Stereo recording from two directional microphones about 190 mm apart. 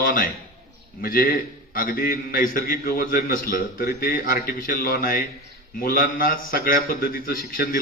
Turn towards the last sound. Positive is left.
turn(degrees=50)  # may be behind; listen again after turning